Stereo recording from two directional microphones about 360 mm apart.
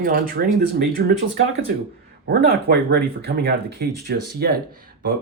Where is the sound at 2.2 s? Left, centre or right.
Right.